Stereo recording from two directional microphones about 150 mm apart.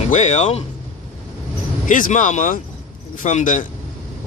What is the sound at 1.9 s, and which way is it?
Speech, 60° left (ahead or behind).